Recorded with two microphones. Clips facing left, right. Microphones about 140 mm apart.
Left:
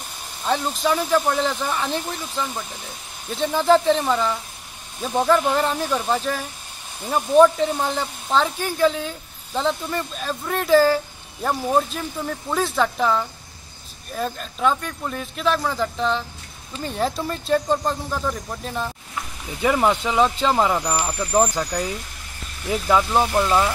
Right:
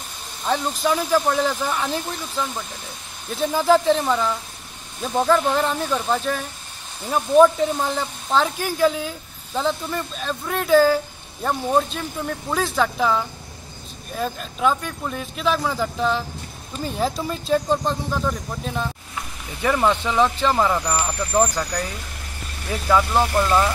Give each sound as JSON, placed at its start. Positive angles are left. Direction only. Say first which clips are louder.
{"t": 0.5, "sound": "speech", "louder": "even", "side_deg": 0}
{"t": 19.6, "sound": "speech", "louder": "left 1 dB", "side_deg": 15}
{"t": 22.7, "sound": "speech", "louder": "even", "side_deg": 15}